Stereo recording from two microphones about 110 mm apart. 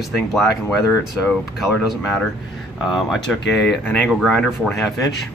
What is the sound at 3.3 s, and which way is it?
Speech, 10° left (ahead or behind).